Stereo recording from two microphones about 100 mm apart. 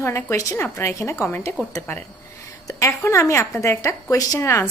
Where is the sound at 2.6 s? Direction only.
30° left (ahead or behind).